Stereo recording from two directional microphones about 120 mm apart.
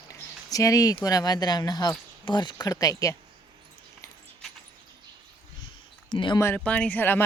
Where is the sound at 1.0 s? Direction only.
30° left (ahead or behind).